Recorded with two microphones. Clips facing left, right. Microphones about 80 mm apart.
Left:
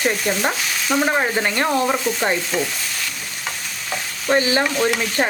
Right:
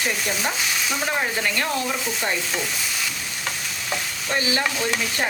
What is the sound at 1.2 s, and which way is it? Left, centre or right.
Speech, left.